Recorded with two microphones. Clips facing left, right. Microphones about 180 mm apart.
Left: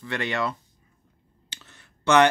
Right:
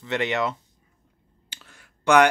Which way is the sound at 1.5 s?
10° right (ahead or behind).